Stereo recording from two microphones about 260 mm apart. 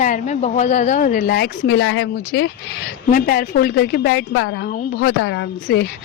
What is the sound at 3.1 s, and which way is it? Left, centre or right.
Speech, left.